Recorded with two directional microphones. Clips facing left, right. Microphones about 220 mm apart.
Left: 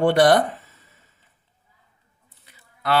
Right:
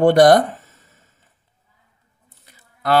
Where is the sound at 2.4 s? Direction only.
45° right (ahead or behind).